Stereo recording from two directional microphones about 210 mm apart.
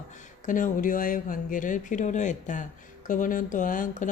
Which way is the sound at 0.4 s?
40° left (ahead or behind).